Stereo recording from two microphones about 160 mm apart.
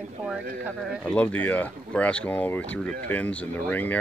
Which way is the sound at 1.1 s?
10° left (ahead or behind).